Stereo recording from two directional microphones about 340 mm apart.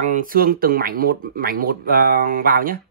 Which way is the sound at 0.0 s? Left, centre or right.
Right.